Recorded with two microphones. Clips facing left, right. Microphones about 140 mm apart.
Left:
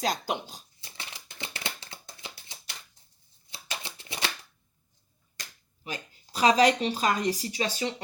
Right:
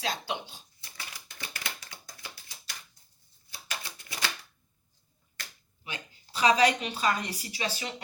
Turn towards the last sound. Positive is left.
turn(degrees=30)  # may be behind; listen again after turning